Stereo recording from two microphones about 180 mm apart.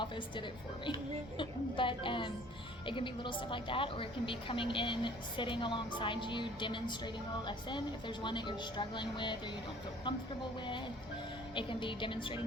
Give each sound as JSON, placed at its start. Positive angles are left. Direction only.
{"t": 1.4, "sound": "a woman's voice", "side_deg": 25}
{"t": 11.5, "sound": "a woman's voice", "side_deg": 30}